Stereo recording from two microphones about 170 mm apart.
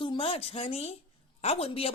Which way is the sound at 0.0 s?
35° left (ahead or behind).